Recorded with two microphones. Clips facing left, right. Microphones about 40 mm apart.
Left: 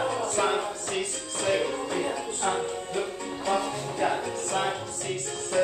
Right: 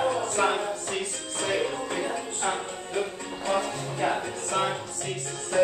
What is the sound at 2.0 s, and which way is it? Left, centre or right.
Music, centre.